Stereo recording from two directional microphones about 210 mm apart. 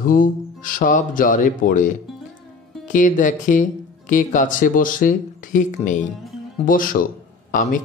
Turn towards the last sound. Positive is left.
turn(degrees=40)  # may be behind; listen again after turning